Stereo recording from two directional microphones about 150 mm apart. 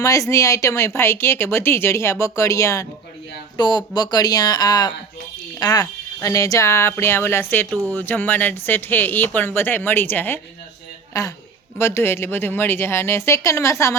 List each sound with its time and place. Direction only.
0.0 s speech: 20° left (ahead or behind)